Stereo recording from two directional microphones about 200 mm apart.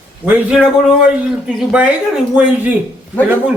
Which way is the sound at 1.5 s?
5° right (ahead or behind).